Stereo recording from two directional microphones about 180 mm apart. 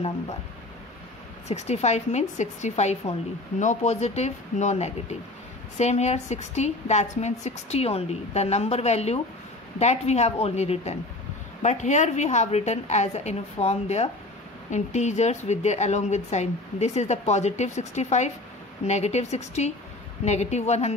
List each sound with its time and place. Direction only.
1.5 s a woman's voice: 40° left (ahead or behind)